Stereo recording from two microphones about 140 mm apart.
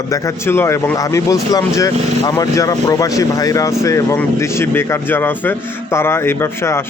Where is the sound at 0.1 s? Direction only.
15° left (ahead or behind).